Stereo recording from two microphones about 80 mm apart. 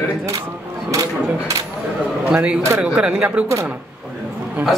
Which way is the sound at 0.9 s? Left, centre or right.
Right.